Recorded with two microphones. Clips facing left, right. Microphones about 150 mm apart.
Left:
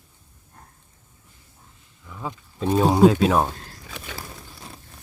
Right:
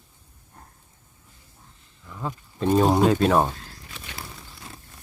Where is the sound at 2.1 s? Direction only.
Centre (ahead or behind).